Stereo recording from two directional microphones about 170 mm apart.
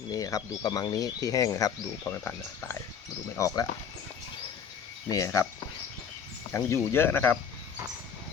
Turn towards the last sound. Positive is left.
turn(degrees=10)  # may be behind; listen again after turning